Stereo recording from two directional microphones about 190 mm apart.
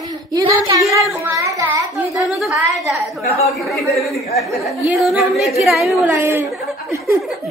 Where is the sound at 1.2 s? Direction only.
15° right (ahead or behind).